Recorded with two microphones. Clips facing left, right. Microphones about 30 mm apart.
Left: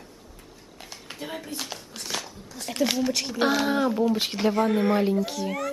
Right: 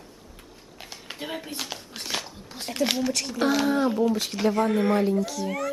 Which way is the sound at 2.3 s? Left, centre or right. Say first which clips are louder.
Right 1 dB; right.